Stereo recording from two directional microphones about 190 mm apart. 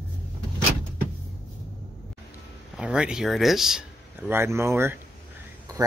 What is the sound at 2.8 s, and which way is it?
Speech, 5° right (ahead or behind).